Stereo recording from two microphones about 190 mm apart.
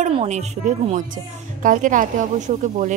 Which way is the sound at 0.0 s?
35° right (ahead or behind).